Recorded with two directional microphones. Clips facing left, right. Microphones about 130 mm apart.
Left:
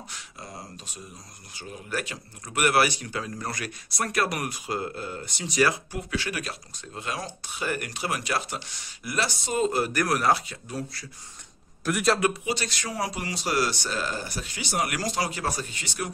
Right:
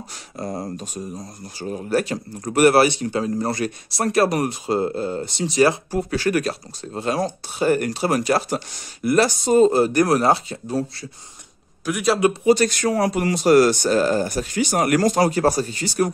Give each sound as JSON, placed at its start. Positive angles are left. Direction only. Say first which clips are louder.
{"t": 0.1, "sound": "speech", "louder": "right 12 dB", "side_deg": -45}
{"t": 11.8, "sound": "a man's voice", "louder": "right 3 dB", "side_deg": 0}
{"t": 12.4, "sound": "speech", "louder": "right 14 dB", "side_deg": -45}